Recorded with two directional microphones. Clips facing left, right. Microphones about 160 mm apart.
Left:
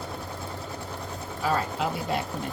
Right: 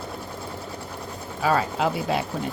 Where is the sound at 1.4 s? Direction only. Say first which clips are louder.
Right 4 dB; 90° right.